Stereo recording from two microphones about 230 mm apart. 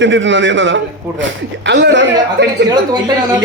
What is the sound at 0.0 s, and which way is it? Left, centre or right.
A man's voice, right.